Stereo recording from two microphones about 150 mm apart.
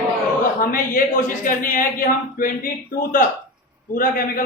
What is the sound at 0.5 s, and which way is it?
A man's voice, 65° left (ahead or behind).